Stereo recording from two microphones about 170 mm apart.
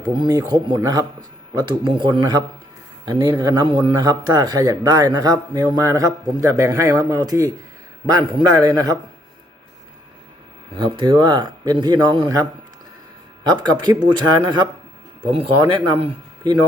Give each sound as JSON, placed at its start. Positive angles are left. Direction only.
{"t": 0.0, "sound": "speech", "side_deg": -25}
{"t": 10.8, "sound": "speech", "side_deg": -30}